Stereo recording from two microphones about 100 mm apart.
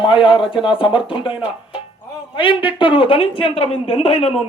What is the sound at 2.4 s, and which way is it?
Speech, 60° left (ahead or behind).